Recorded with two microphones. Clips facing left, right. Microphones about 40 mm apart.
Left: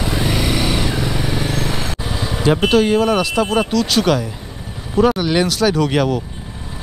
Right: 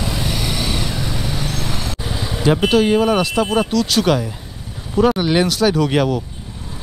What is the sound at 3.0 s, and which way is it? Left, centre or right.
Speech, right.